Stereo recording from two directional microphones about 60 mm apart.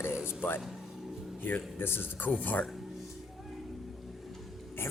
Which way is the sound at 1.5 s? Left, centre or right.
Left.